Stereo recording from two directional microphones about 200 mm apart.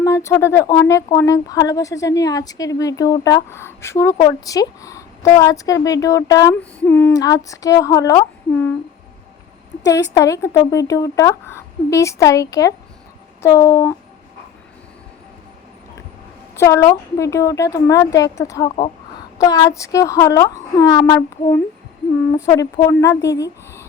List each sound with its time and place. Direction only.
0.0 s speech: 15° left (ahead or behind)
9.8 s speech: 15° left (ahead or behind)
16.6 s speech: 15° left (ahead or behind)